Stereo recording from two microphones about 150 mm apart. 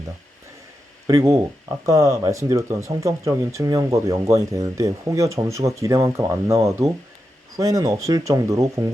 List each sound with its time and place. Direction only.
1.0 s speech: 20° right (ahead or behind)